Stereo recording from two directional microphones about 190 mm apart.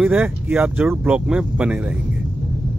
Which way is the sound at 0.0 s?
10° right (ahead or behind).